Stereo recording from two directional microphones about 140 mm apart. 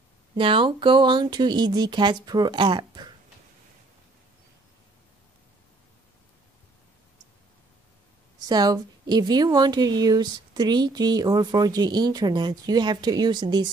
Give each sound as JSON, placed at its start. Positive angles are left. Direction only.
{"t": 0.4, "sound": "speech", "side_deg": -40}
{"t": 8.5, "sound": "a woman's voice", "side_deg": -30}